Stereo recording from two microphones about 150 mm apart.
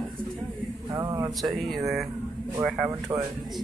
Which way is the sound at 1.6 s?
Centre (ahead or behind).